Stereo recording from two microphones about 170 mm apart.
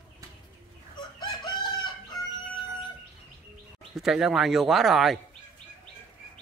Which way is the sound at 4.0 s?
5° right (ahead or behind).